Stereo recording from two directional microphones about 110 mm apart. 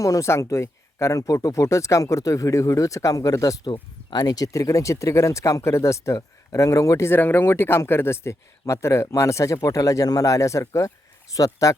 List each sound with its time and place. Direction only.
0.0 s speech: 30° left (ahead or behind)